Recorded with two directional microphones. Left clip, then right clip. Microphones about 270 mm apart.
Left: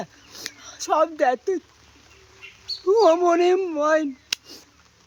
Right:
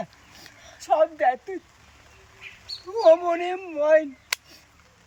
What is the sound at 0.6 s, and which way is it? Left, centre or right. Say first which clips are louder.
Speech: even; centre.